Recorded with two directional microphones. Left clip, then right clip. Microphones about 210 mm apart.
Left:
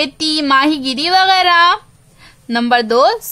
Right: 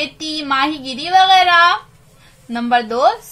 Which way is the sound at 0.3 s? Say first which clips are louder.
Left 5 dB; 40° left (ahead or behind).